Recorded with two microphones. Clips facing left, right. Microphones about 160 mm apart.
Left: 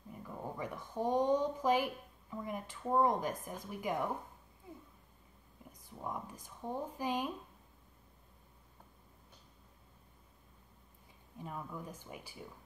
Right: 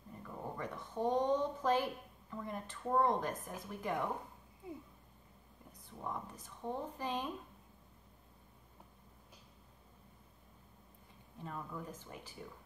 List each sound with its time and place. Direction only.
0.1 s speech: 10° left (ahead or behind)
5.9 s speech: 10° left (ahead or behind)
11.3 s speech: 10° left (ahead or behind)